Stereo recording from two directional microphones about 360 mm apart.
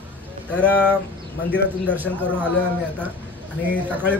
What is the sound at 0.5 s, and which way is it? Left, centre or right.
A man's voice, centre.